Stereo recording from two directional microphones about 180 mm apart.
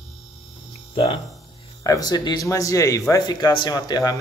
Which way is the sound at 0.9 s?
30° left (ahead or behind).